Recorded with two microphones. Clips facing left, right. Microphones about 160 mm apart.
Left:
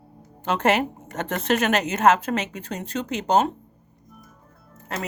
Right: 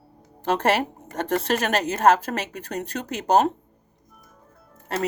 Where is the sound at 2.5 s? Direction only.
55° right (ahead or behind).